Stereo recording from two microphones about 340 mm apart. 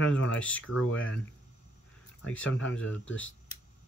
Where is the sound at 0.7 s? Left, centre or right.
Left.